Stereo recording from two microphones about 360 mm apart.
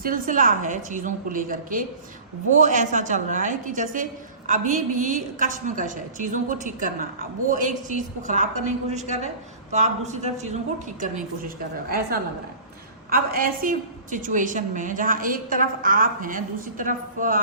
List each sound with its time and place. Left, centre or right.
0.0 s a woman's voice: right